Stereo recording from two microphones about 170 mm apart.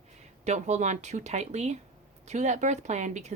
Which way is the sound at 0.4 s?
40° right (ahead or behind).